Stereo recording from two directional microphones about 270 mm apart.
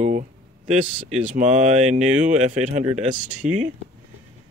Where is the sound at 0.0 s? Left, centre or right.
Right.